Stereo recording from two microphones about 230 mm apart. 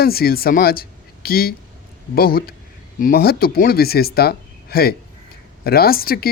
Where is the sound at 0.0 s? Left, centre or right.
Left.